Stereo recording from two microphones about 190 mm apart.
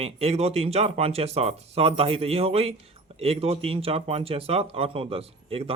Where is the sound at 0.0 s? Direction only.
30° right (ahead or behind).